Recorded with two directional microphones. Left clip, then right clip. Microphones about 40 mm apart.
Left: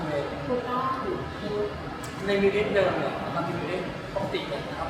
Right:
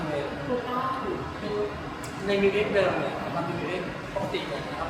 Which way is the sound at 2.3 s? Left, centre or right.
Centre.